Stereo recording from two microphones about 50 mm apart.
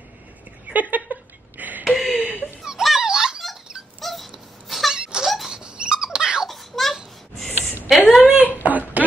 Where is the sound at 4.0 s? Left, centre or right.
Centre.